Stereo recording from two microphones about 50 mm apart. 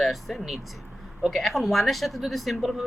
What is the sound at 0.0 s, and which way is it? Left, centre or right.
Speech, centre.